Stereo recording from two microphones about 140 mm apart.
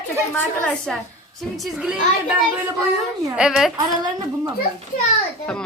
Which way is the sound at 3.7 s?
30° right (ahead or behind).